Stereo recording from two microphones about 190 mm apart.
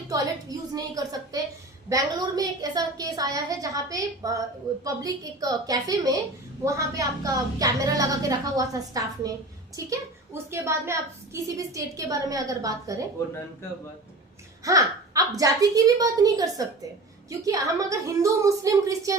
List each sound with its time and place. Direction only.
0.1 s a woman's voice: 20° right (ahead or behind)
13.1 s speech: 15° left (ahead or behind)
14.6 s a woman's voice: 15° right (ahead or behind)